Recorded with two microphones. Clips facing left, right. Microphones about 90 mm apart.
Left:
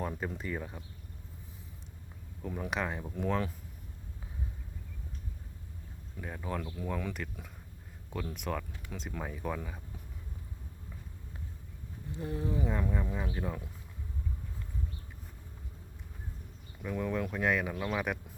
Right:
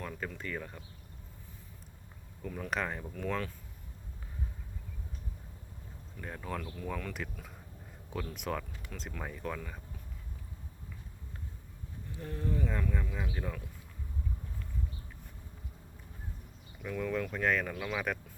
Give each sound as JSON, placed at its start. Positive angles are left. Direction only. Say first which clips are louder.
{"t": 0.0, "sound": "speech", "louder": "left 4 dB", "side_deg": 25}
{"t": 0.3, "sound": "speech", "louder": "left 2 dB", "side_deg": 15}
{"t": 2.4, "sound": "speech", "louder": "left 1 dB", "side_deg": 10}
{"t": 3.1, "sound": "speech", "louder": "left 3 dB", "side_deg": 15}
{"t": 6.1, "sound": "speech", "louder": "left 2 dB", "side_deg": 5}
{"t": 12.2, "sound": "speech", "louder": "left 2 dB", "side_deg": 10}
{"t": 17.0, "sound": "speech", "louder": "even", "side_deg": 10}